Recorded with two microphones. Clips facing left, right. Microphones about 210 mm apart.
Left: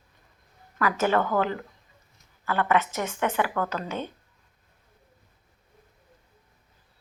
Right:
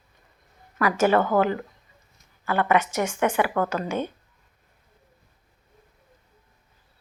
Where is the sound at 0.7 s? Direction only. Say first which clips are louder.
Right 4 dB; 10° right (ahead or behind).